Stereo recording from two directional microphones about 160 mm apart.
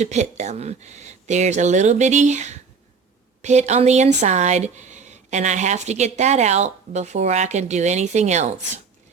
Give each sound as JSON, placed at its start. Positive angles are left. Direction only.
{"t": 0.0, "sound": "speech", "side_deg": -45}